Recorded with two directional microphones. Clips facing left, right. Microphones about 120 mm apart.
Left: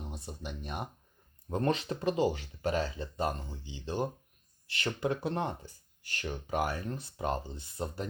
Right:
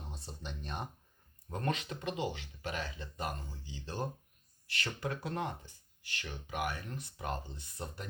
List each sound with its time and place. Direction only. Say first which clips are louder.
0.1 s speech: left 4 dB; 10° left (ahead or behind)
1.5 s speech: left 6 dB; 30° left (ahead or behind)
6.0 s speech: left 7 dB; 45° left (ahead or behind); by 8.0 s 25° left (ahead or behind)